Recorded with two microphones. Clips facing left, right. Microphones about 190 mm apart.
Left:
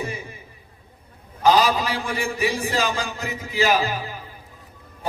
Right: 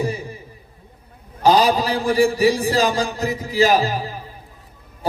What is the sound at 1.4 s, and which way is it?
A man's voice, 35° right (ahead or behind).